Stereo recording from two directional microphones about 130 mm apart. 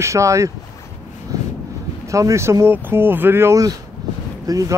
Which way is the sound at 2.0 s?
25° right (ahead or behind).